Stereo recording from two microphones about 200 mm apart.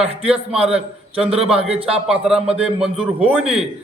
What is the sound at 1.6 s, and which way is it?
Speech, 30° right (ahead or behind).